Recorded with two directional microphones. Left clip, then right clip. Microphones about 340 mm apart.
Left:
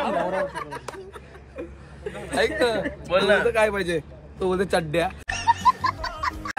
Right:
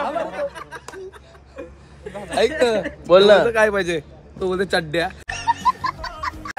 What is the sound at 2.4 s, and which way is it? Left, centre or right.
A man's voice, right.